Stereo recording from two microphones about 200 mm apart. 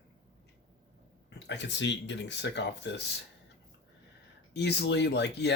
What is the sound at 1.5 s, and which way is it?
Speech, 60° left (ahead or behind).